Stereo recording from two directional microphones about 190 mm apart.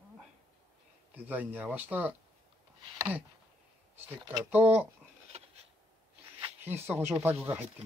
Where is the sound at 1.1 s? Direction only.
10° right (ahead or behind).